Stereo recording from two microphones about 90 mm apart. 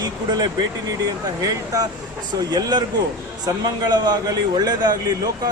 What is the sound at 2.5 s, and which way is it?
Speech, 50° right (ahead or behind).